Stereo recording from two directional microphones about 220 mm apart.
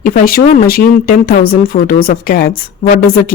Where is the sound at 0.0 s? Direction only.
40° left (ahead or behind).